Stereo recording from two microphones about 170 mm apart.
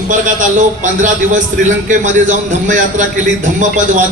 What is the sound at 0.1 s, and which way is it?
A man's voice, 50° right (ahead or behind).